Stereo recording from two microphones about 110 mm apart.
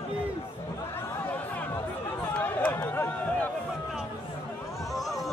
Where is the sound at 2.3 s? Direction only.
15° left (ahead or behind).